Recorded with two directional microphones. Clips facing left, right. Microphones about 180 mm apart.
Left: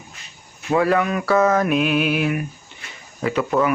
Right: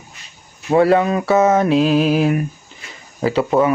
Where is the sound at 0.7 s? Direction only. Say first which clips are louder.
Right 5 dB; 30° right (ahead or behind).